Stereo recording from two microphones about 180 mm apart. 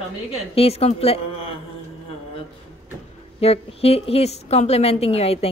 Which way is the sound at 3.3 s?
35° left (ahead or behind).